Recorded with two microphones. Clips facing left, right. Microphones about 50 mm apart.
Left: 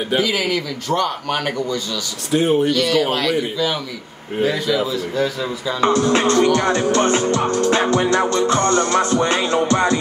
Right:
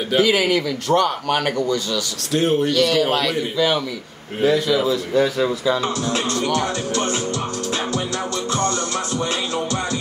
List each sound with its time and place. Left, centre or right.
0.2 s a man's voice: centre
2.3 s speech: centre
2.7 s a man's voice: centre
5.8 s music: left